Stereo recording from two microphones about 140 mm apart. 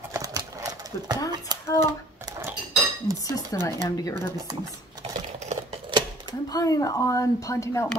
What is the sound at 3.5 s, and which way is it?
Speech, 25° left (ahead or behind).